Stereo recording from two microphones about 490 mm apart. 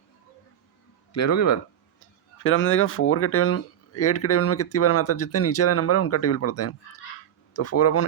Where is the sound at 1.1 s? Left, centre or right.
Left.